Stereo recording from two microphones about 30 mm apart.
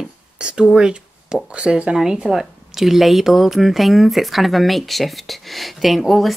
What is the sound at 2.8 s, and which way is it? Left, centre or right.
A woman's voice, centre.